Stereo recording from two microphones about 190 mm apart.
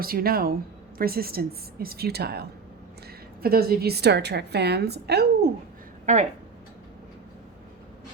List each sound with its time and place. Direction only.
0.0 s a woman's voice: 50° right (ahead or behind)
6.1 s speech: 40° right (ahead or behind)